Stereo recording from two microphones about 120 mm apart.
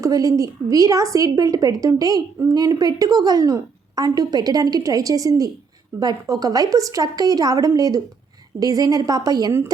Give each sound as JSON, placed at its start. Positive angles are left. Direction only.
{"t": 0.0, "sound": "a woman's voice", "side_deg": -30}
{"t": 9.5, "sound": "a woman's voice", "side_deg": -20}